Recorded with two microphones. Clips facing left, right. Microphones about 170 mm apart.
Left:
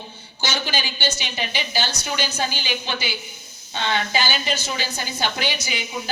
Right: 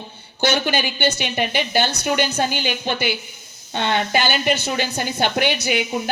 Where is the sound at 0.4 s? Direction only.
55° right (ahead or behind).